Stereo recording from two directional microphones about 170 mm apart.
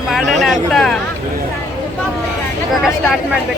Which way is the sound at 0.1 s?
Centre (ahead or behind).